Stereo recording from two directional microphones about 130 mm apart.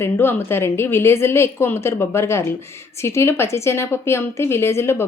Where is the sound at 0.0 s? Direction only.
15° left (ahead or behind).